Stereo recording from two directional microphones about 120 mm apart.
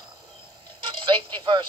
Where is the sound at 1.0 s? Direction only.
40° right (ahead or behind).